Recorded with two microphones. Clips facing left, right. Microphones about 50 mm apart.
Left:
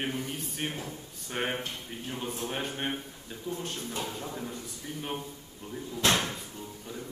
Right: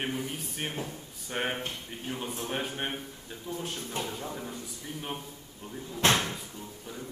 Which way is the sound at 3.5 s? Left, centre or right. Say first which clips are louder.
Left 1 dB; right.